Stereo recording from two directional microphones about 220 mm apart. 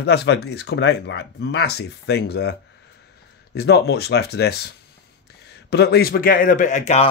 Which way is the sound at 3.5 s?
50° left (ahead or behind).